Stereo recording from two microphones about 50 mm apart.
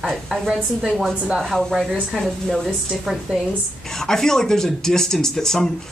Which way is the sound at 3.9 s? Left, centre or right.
Centre.